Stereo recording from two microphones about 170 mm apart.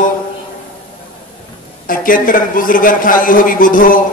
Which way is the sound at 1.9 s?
55° left (ahead or behind).